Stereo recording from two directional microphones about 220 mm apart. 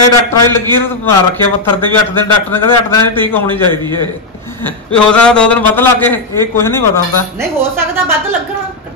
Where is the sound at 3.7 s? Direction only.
20° right (ahead or behind).